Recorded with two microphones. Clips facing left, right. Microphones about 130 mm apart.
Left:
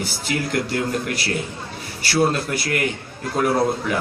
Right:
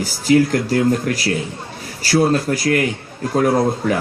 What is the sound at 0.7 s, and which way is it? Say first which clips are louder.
Speech: right 7 dB; 40° right (ahead or behind).